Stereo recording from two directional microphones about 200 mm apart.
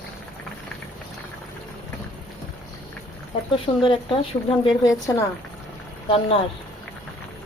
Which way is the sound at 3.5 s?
25° left (ahead or behind).